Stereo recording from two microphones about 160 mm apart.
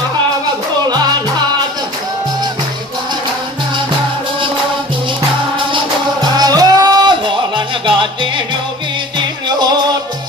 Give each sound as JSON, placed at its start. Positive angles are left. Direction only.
{"t": 6.2, "sound": "music", "side_deg": -25}
{"t": 9.5, "sound": "music", "side_deg": -25}